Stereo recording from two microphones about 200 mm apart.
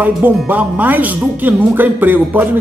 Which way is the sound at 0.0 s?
10° right (ahead or behind).